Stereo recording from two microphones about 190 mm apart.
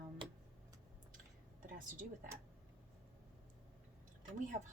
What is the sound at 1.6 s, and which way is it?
Speech, 45° right (ahead or behind).